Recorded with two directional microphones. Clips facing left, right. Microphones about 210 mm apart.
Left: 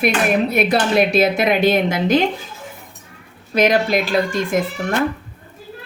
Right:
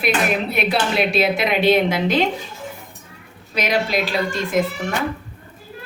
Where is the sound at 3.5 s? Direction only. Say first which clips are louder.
Left 5 dB; 50° left (ahead or behind).